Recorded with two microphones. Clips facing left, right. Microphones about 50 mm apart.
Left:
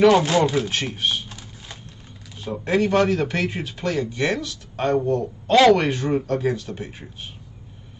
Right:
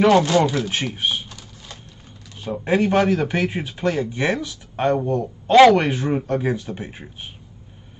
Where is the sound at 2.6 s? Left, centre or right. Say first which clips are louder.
Right 1 dB; centre.